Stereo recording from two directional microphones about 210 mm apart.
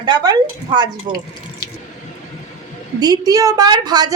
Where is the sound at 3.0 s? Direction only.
20° right (ahead or behind).